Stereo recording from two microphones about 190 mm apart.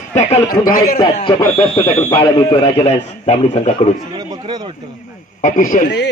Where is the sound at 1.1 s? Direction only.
25° left (ahead or behind).